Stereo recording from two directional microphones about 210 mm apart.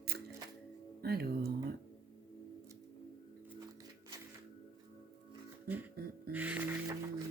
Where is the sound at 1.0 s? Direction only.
50° right (ahead or behind).